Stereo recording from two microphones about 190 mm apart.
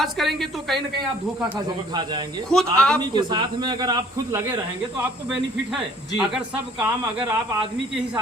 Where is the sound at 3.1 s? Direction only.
25° right (ahead or behind).